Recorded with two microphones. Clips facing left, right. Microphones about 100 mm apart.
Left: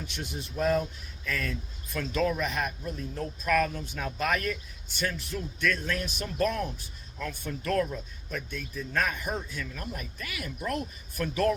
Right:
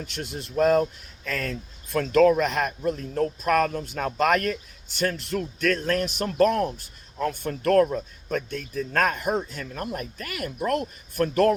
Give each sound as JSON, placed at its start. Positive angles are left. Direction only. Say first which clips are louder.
{"t": 0.0, "sound": "speech", "louder": "right 4 dB", "side_deg": -70}
{"t": 4.9, "sound": "speech", "louder": "right 7 dB", "side_deg": -75}